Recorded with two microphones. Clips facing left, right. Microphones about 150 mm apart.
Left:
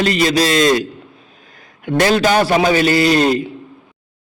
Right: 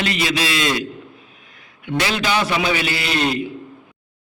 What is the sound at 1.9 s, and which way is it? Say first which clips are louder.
A man's voice: left 7 dB; 45° left (ahead or behind).